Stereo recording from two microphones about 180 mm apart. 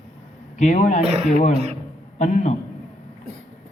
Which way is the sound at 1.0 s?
35° right (ahead or behind).